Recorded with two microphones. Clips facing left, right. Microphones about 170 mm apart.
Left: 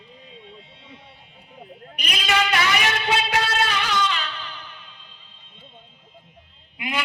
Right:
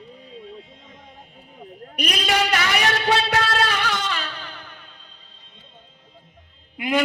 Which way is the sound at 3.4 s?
45° right (ahead or behind).